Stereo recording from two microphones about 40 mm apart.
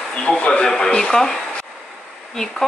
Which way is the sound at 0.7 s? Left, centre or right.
Centre.